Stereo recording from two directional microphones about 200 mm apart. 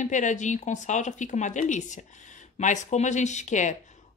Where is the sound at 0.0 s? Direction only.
40° left (ahead or behind).